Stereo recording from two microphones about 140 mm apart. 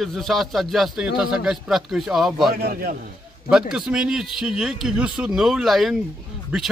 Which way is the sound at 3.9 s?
5° right (ahead or behind).